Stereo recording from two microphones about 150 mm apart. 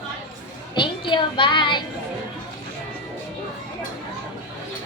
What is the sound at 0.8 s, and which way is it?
Child singing, 30° left (ahead or behind).